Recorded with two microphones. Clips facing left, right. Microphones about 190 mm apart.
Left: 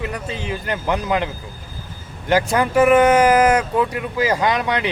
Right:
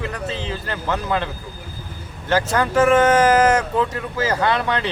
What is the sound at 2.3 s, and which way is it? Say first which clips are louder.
Speech: left 2 dB; 15° left (ahead or behind).